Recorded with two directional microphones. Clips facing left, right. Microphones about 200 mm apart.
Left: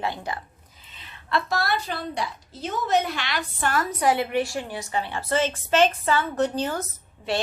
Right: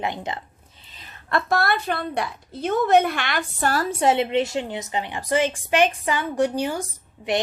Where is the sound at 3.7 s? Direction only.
30° right (ahead or behind); by 7.4 s 15° right (ahead or behind).